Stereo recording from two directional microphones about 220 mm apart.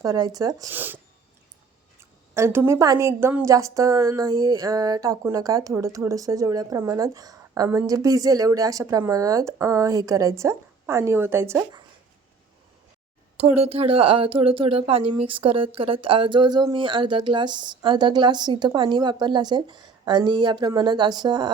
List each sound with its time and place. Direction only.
0.0 s a woman's voice: 15° right (ahead or behind)
13.3 s speech: 30° right (ahead or behind)